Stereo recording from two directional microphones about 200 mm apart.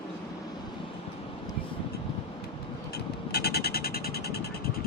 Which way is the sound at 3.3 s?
55° left (ahead or behind).